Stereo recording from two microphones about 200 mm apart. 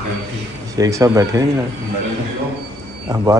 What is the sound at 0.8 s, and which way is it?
Speech, 15° right (ahead or behind).